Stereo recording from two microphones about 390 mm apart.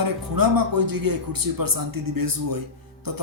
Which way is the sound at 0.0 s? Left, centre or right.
Right.